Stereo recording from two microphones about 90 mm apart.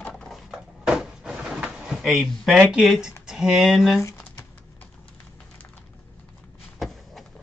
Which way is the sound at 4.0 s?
35° left (ahead or behind).